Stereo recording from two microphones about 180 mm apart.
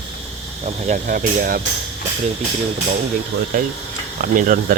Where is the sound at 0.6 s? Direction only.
45° right (ahead or behind).